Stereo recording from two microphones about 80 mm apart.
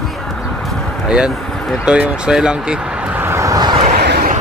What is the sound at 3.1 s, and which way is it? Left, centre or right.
Vehicle, right.